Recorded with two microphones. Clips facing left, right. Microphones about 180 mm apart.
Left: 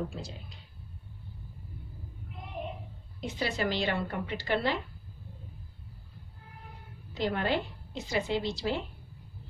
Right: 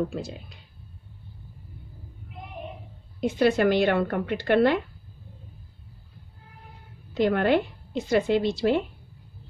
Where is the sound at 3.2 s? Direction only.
50° right (ahead or behind).